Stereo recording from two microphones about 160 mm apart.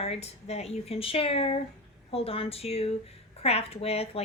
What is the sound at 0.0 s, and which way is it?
A woman's voice, 40° left (ahead or behind).